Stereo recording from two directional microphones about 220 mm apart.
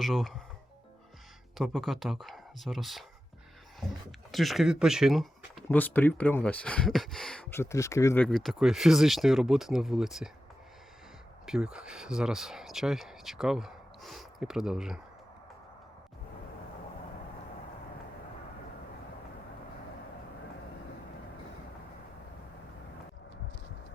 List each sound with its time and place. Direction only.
0.0 s speech: centre (ahead or behind)
1.5 s speech: centre (ahead or behind)
4.3 s speech: centre (ahead or behind)
11.4 s speech: centre (ahead or behind)